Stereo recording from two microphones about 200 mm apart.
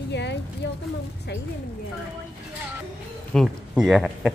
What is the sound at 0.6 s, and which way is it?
Speech, 65° left (ahead or behind).